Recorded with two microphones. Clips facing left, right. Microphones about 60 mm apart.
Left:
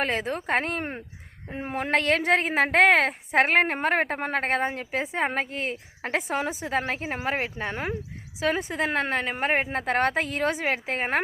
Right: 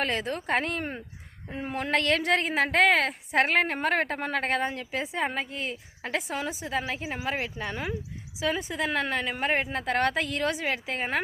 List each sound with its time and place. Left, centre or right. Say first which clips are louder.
0.0 s a woman's voice: left 2 dB; left
0.5 s a woman's voice: left 1 dB; left